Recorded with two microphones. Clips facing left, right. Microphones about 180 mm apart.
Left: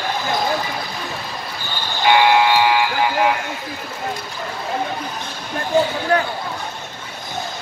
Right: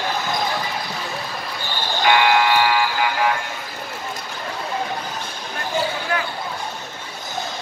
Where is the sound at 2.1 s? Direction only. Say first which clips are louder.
Left 4 dB; 20° left (ahead or behind).